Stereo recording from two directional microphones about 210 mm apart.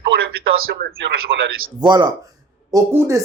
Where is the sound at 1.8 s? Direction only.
20° right (ahead or behind).